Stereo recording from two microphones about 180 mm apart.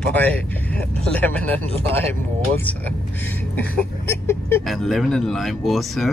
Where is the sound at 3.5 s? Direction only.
10° left (ahead or behind).